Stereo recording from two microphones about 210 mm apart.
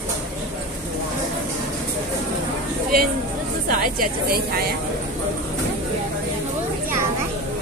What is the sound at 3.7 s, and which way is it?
Speech, 40° right (ahead or behind).